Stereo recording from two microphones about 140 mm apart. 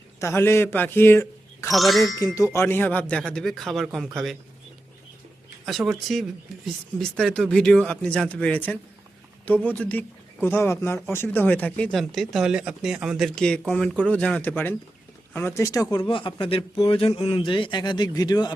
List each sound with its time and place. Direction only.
0.2 s speech: 20° left (ahead or behind)
1.7 s speech: centre (ahead or behind)
2.1 s speech: 25° left (ahead or behind); by 4.4 s centre (ahead or behind)
5.6 s a man's voice: centre (ahead or behind); by 18.5 s 30° left (ahead or behind)